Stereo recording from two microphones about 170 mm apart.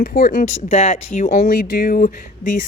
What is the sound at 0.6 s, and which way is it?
Speech, 40° left (ahead or behind).